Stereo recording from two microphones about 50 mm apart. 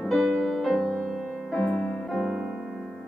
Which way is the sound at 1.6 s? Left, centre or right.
Centre.